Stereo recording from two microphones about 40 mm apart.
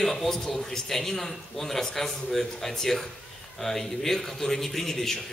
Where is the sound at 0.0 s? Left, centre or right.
Centre.